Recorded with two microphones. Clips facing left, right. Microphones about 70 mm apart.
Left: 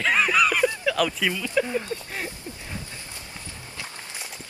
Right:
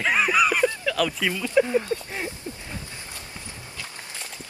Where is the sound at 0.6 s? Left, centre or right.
Centre.